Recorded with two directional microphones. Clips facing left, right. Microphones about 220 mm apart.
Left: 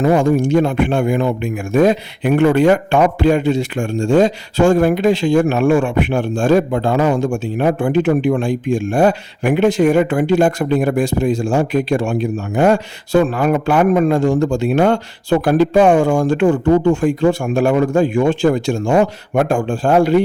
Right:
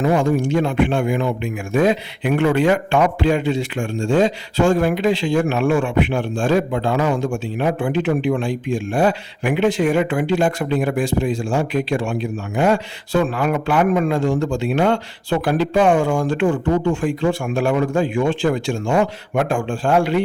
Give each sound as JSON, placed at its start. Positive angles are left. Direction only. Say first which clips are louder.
{"t": 0.0, "sound": "speech", "louder": "left 4 dB", "side_deg": 45}